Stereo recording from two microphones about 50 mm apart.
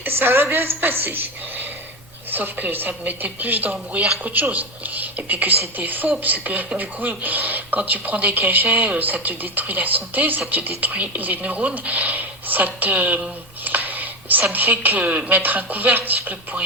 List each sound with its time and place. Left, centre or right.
0.0 s a woman's voice: right
13.7 s a sound: right
14.5 s speech: right